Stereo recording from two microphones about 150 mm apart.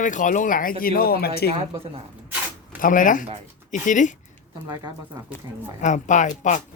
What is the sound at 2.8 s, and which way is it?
Speech, 60° left (ahead or behind).